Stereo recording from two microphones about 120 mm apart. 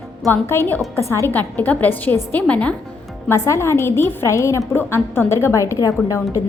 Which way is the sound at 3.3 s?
25° left (ahead or behind).